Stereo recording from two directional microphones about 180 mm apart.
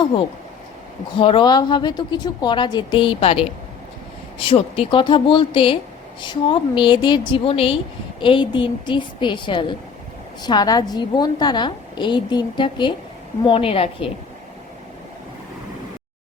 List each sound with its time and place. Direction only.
1.2 s a woman's voice: 30° left (ahead or behind)